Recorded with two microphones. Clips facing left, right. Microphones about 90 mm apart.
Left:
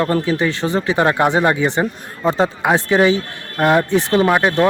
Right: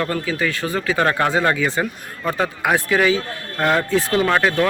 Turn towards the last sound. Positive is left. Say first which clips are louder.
# left 3 dB
turn(degrees=20)  # may be behind; listen again after turning